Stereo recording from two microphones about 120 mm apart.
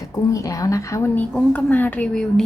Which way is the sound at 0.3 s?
25° left (ahead or behind).